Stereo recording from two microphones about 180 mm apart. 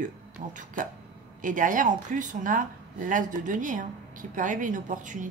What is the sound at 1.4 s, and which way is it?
A woman's voice, 45° right (ahead or behind).